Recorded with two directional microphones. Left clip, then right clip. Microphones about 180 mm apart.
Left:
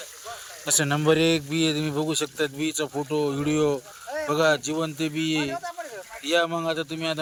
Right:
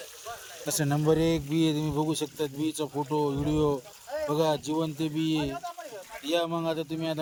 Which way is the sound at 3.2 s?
25° left (ahead or behind).